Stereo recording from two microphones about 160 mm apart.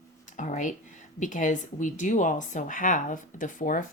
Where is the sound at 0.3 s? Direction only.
50° left (ahead or behind).